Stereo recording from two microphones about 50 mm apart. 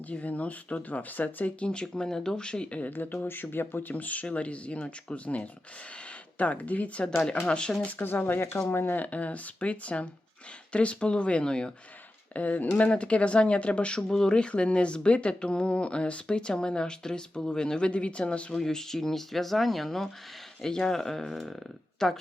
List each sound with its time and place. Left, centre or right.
0.1 s speech: left
2.8 s speech: left
7.8 s speech: left
8.0 s speech: left
9.0 s speech: left
12.3 s speech: left
18.5 s speech: centre